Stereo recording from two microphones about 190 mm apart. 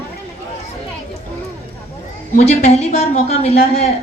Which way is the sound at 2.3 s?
40° left (ahead or behind).